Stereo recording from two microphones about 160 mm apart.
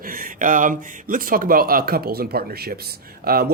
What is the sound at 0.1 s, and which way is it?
Speech, 60° right (ahead or behind).